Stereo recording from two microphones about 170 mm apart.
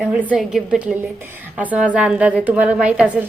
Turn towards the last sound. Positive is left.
turn(degrees=-10)  # may be behind; listen again after turning